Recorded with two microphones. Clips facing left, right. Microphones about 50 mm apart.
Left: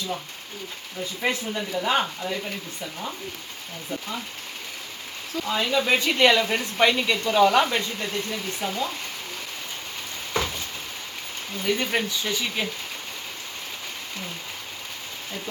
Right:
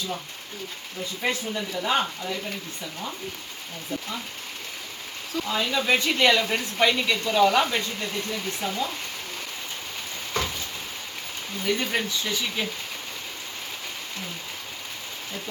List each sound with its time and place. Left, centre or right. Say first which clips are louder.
1.2 s speech: left 1 dB; centre
5.5 s speech: left 1 dB; centre
10.3 s a sound: left 2 dB; centre
11.6 s speech: left 1 dB; centre